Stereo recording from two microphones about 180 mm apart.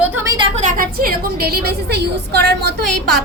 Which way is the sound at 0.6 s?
45° right (ahead or behind).